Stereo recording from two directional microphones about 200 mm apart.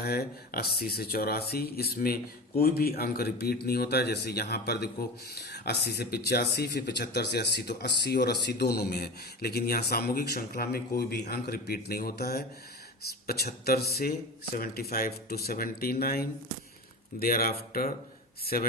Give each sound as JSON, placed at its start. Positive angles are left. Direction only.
{"t": 0.0, "sound": "speech", "side_deg": 50}